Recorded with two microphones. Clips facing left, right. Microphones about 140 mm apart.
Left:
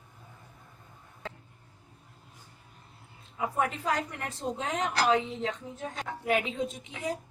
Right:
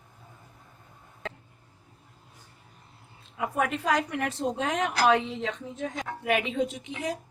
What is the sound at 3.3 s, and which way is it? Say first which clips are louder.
A woman's voice: right 2 dB; 80° right.